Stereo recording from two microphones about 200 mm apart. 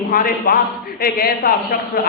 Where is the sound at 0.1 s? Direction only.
45° left (ahead or behind).